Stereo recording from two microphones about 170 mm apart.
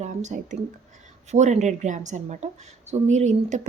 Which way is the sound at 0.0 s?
45° right (ahead or behind).